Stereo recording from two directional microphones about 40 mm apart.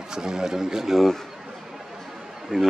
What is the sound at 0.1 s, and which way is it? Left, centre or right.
Speech, centre.